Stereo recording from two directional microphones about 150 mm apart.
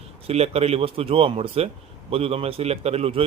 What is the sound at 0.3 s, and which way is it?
Speech, 45° right (ahead or behind).